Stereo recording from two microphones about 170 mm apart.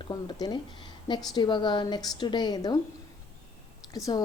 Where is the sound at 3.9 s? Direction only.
20° left (ahead or behind).